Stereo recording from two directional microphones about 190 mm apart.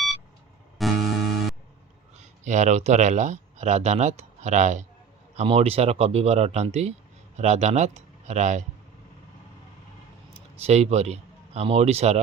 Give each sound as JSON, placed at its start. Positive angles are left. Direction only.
{"t": 0.8, "sound": "music", "side_deg": 0}
{"t": 2.4, "sound": "speech", "side_deg": -40}
{"t": 10.3, "sound": "speech", "side_deg": -35}